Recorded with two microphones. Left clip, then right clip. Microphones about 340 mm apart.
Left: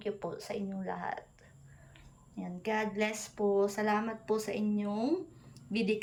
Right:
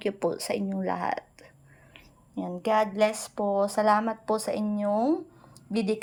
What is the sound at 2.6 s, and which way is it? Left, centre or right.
Speech, centre.